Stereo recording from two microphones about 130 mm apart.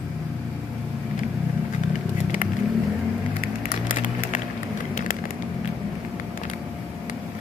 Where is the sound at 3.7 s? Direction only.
90° left.